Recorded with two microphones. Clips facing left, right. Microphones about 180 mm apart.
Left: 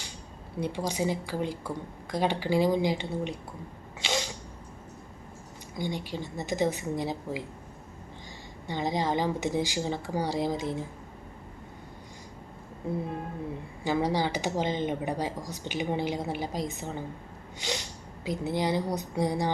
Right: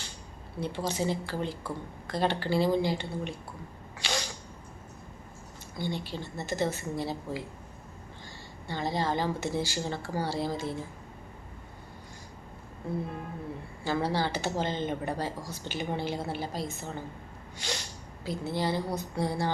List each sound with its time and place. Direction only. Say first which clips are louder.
0.6 s speech: left 1 dB; 15° left (ahead or behind)
4.0 s a sound: left 3 dB; 20° left (ahead or behind)
5.7 s speech: left 1 dB; 15° left (ahead or behind)
8.6 s speech: left 2 dB; 15° left (ahead or behind)
13.8 s speech: left 2 dB; 15° left (ahead or behind)
17.6 s snort: left 3 dB; 20° left (ahead or behind)
18.3 s speech: left 2 dB; 15° left (ahead or behind)